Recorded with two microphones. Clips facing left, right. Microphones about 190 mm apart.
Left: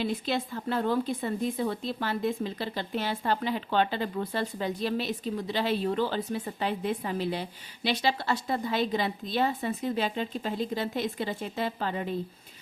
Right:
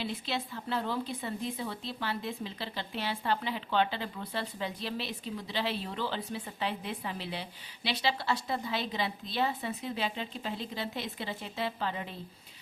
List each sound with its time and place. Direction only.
0.0 s speech: 50° left (ahead or behind)